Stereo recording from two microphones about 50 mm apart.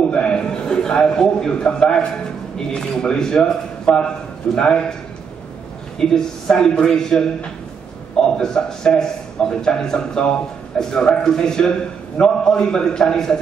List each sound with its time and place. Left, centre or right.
0.1 s a sound: centre
2.5 s a man's voice: centre
5.9 s a man's voice: centre
8.3 s a man's voice: centre